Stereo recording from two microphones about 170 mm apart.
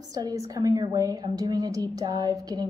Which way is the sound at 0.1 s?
20° right (ahead or behind).